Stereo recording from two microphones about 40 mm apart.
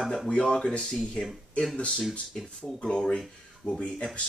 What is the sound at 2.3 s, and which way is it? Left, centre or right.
Speech, centre.